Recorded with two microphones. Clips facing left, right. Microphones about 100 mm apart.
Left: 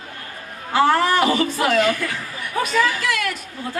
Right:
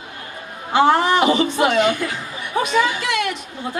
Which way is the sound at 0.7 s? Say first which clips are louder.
Right 2 dB; 25° right (ahead or behind).